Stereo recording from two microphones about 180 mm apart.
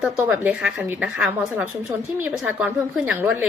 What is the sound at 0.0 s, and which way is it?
A woman's voice, 10° right (ahead or behind).